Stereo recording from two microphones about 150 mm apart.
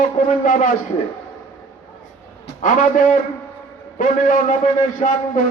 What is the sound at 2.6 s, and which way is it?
A man's voice, 60° left (ahead or behind).